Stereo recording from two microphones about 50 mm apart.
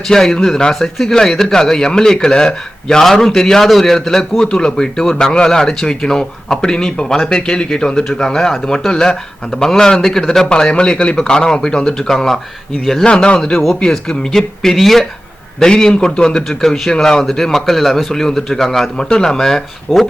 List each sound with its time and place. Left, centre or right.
0.1 s a man's voice: centre
10.5 s a man's voice: centre
13.1 s a man's voice: centre
19.9 s speech: centre